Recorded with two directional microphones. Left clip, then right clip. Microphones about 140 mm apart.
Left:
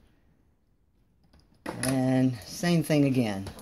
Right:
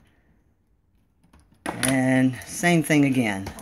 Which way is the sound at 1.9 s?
20° left (ahead or behind).